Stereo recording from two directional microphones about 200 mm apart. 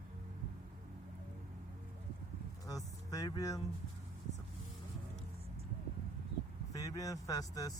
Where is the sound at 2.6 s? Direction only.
20° left (ahead or behind).